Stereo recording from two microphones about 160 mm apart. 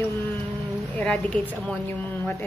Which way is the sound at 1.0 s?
10° left (ahead or behind).